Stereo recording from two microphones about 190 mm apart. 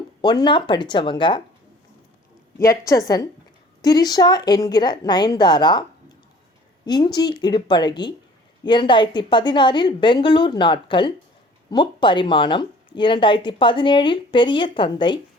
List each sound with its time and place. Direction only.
0.2 s speech: 25° left (ahead or behind)
2.6 s a woman's voice: 15° left (ahead or behind)
6.8 s speech: 20° left (ahead or behind)